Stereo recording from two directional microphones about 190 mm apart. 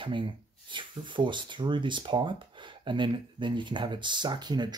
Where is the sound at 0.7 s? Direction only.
25° right (ahead or behind).